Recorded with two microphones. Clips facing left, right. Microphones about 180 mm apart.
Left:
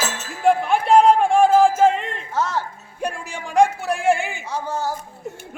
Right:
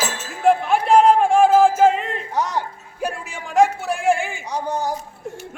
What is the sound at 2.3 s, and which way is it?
Music, 15° right (ahead or behind).